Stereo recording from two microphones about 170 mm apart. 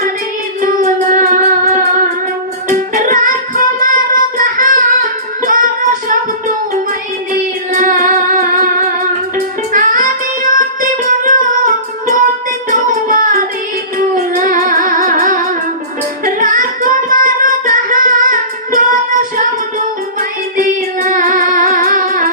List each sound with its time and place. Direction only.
0.6 s music: 50° right (ahead or behind)
5.4 s child singing: 50° right (ahead or behind)
7.7 s music: 50° right (ahead or behind)
12.7 s child singing: 50° right (ahead or behind)
14.2 s music: 50° right (ahead or behind)
16.2 s singing: 50° right (ahead or behind)
20.1 s music: 50° right (ahead or behind)